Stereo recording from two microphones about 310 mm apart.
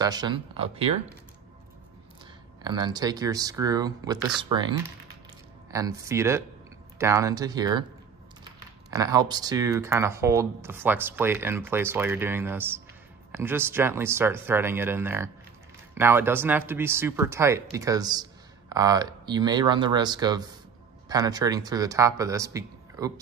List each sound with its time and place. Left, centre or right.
0.0 s speech: centre
2.6 s speech: centre
8.9 s speech: centre